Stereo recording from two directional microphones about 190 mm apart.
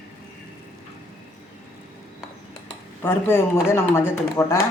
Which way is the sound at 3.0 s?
10° left (ahead or behind).